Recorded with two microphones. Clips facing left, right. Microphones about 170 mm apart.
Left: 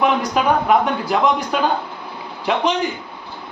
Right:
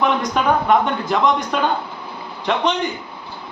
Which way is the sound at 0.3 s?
5° left (ahead or behind).